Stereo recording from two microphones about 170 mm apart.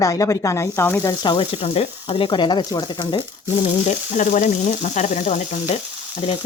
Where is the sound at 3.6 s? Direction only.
45° left (ahead or behind).